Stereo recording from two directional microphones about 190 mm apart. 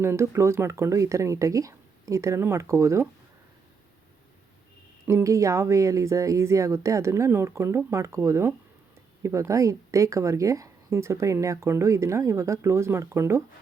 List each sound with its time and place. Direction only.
0.0 s speech: 15° right (ahead or behind)
5.0 s speech: 15° right (ahead or behind)